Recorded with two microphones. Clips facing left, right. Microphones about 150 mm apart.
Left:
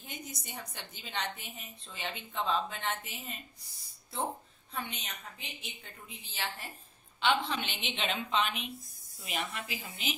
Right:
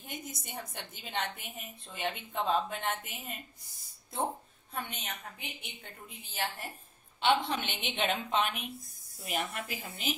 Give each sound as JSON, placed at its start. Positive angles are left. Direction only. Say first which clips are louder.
{"t": 0.0, "sound": "a woman's voice", "louder": "right 2 dB", "side_deg": -50}
{"t": 4.8, "sound": "a woman's voice", "louder": "right 2 dB", "side_deg": -55}